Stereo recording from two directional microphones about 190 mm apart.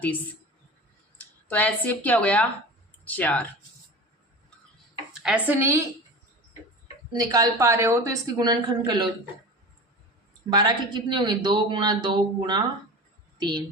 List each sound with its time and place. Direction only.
1.5 s a woman's voice: 10° left (ahead or behind)
5.2 s speech: 10° right (ahead or behind)
7.1 s a woman's voice: 20° right (ahead or behind)
10.5 s a woman's voice: 20° right (ahead or behind)